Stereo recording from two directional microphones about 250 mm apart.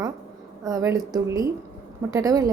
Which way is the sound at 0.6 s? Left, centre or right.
Centre.